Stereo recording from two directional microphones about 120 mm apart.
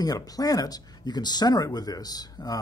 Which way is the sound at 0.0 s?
30° left (ahead or behind).